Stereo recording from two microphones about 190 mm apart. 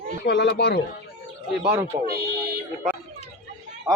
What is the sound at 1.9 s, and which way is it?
Speech, 20° right (ahead or behind).